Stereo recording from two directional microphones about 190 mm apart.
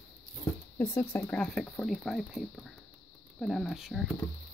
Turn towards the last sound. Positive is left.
turn(degrees=0)  # may be behind; listen again after turning